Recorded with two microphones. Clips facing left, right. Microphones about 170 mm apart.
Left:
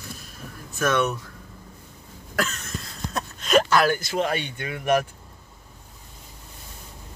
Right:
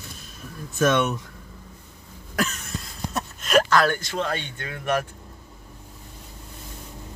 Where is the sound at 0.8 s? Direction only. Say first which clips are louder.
Right 2 dB; 25° right (ahead or behind).